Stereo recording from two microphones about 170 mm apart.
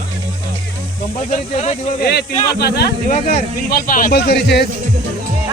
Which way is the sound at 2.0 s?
75° left (ahead or behind).